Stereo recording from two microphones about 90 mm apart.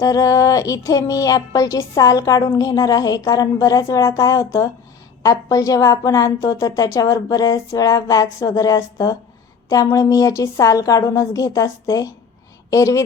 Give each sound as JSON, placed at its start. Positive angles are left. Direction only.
{"t": 0.0, "sound": "speech", "side_deg": 40}